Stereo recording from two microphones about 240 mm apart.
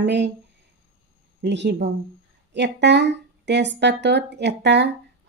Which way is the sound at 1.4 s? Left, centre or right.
Right.